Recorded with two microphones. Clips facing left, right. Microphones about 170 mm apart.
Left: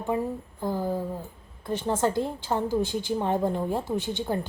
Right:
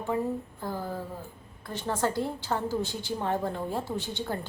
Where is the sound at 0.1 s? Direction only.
15° left (ahead or behind).